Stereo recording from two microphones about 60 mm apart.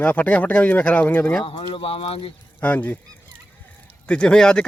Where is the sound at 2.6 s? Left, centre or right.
Left.